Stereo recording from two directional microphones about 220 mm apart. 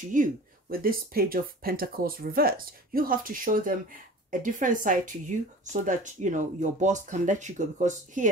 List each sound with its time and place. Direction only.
0.0 s speech: 35° right (ahead or behind)